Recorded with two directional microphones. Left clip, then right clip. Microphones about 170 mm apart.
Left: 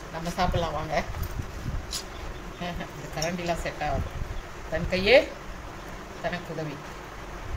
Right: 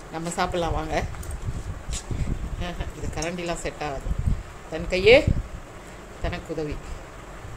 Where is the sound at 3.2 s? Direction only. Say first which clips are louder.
Even; 60° right (ahead or behind).